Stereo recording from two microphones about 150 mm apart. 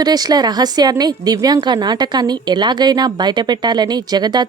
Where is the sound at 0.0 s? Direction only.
25° right (ahead or behind).